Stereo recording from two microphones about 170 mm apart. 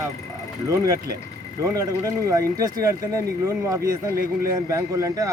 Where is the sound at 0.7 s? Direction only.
20° right (ahead or behind).